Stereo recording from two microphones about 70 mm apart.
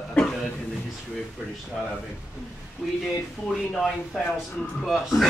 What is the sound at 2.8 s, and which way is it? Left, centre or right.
Speech, centre.